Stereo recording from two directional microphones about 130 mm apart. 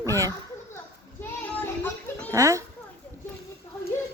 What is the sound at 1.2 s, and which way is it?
Child singing, 10° left (ahead or behind).